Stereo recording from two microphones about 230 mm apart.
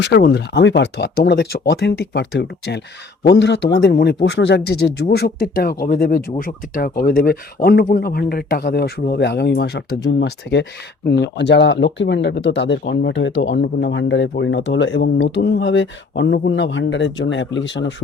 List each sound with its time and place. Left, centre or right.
0.0 s speech: left